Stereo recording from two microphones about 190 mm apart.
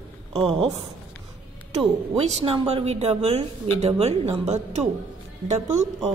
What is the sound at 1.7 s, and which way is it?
Speech, 30° right (ahead or behind).